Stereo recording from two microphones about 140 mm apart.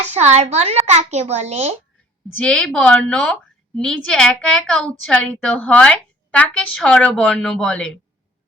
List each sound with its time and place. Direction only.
0.0 s a child's voice: 50° right (ahead or behind)
2.4 s a woman's voice: 5° left (ahead or behind)